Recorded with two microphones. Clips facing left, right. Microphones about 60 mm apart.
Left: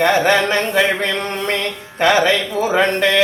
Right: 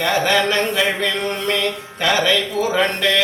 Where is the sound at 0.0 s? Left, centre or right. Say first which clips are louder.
Left 3 dB; left.